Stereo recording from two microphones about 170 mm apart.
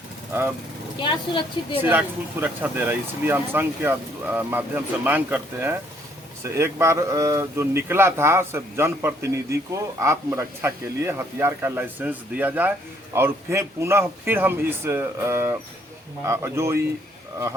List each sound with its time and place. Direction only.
0.9 s speech: 30° left (ahead or behind)
1.8 s speech: 10° right (ahead or behind)